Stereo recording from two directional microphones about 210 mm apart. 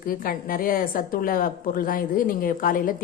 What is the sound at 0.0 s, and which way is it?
A woman's voice, 45° left (ahead or behind).